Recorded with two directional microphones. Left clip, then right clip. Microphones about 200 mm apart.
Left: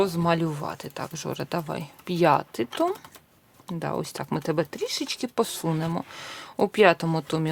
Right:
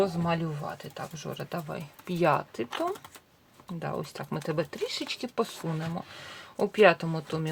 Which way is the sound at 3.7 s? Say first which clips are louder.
Left 5 dB; 35° left (ahead or behind).